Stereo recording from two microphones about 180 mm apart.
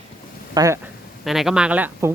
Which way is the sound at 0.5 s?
20° right (ahead or behind).